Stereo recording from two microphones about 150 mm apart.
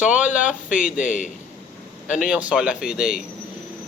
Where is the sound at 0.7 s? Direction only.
60° left (ahead or behind).